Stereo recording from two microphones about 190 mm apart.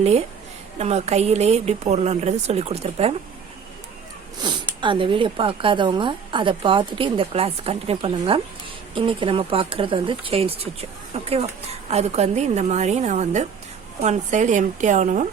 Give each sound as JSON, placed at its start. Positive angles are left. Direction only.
{"t": 0.8, "sound": "speech", "side_deg": -35}
{"t": 4.4, "sound": "speech", "side_deg": -25}